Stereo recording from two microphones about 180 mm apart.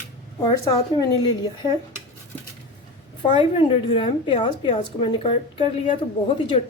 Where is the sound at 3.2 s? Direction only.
30° left (ahead or behind).